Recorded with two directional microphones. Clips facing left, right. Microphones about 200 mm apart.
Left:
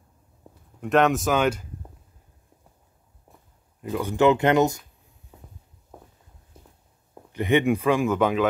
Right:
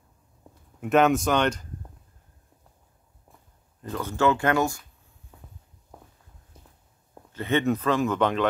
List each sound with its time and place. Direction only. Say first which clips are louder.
0.7 s speech: even; 5° right (ahead or behind)
3.8 s speech: left 4 dB; 10° left (ahead or behind)
7.3 s speech: left 3 dB; 15° left (ahead or behind)